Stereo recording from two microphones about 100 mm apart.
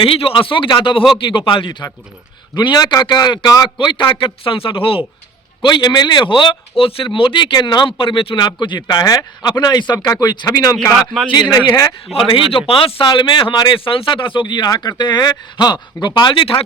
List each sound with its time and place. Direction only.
0.0 s speech: 65° left (ahead or behind)
5.6 s a man's voice: 50° left (ahead or behind)
12.1 s speech: 65° left (ahead or behind)